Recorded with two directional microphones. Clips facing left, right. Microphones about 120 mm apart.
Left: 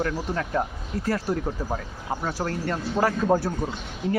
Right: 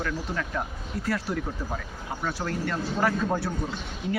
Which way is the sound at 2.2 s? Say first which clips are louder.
Left 1 dB; 35° left (ahead or behind).